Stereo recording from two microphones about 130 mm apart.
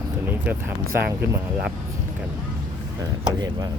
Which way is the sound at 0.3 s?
15° right (ahead or behind).